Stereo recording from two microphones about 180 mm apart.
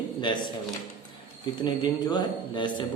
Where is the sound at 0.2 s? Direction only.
25° left (ahead or behind).